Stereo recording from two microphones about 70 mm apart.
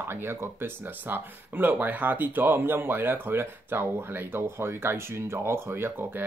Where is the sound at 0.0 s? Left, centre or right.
Right.